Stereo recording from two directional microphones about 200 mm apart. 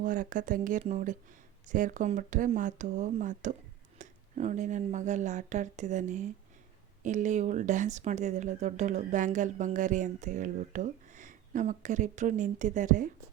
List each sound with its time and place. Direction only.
0.0 s a woman's voice: 40° right (ahead or behind)